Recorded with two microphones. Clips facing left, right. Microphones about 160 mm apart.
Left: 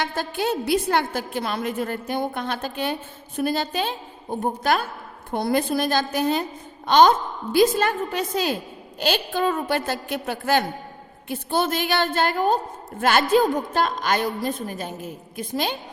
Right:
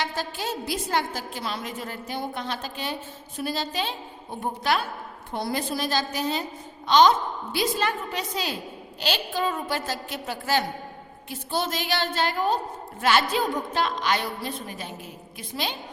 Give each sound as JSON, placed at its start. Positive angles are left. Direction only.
{"t": 0.0, "sound": "a woman's voice", "side_deg": 55}